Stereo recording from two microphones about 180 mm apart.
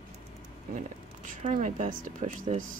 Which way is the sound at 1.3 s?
45° right (ahead or behind).